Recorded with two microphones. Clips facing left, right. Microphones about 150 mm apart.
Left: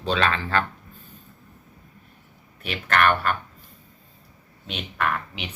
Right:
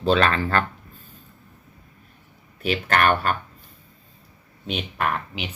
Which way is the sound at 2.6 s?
35° right (ahead or behind).